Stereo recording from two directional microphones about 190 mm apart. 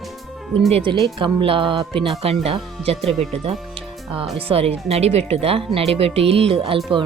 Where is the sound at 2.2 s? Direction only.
30° right (ahead or behind).